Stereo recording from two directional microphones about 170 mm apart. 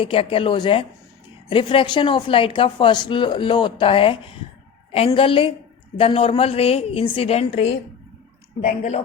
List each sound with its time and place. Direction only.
0.0 s a woman's voice: 30° left (ahead or behind)